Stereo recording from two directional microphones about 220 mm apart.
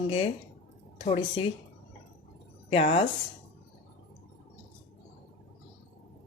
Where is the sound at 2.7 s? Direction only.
25° left (ahead or behind).